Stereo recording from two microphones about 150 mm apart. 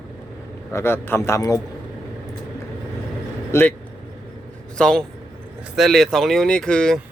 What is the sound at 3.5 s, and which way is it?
Speech, 15° left (ahead or behind).